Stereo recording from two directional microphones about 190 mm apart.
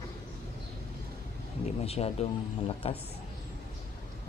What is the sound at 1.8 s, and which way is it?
Speech, 30° left (ahead or behind).